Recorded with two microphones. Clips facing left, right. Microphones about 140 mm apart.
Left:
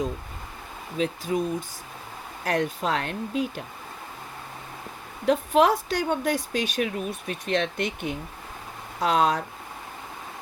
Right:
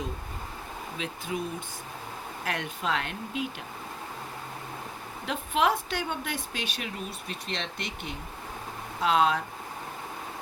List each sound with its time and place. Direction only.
0.9 s speech: 40° left (ahead or behind)
2.4 s speech: 40° left (ahead or behind)
5.2 s speech: 40° left (ahead or behind)